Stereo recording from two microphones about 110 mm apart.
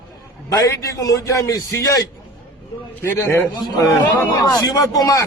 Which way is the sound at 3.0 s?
25° left (ahead or behind).